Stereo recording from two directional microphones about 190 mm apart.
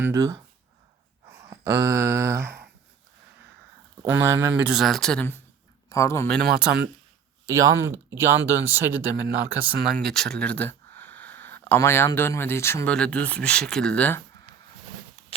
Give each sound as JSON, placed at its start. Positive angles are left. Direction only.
{"t": 0.0, "sound": "speech", "side_deg": -15}
{"t": 1.5, "sound": "speech", "side_deg": -15}
{"t": 4.0, "sound": "speech", "side_deg": -10}
{"t": 7.4, "sound": "speech", "side_deg": -15}
{"t": 15.3, "sound": "a sound", "side_deg": 30}